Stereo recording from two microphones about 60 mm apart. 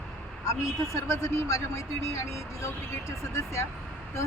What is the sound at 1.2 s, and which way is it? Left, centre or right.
Speech, left.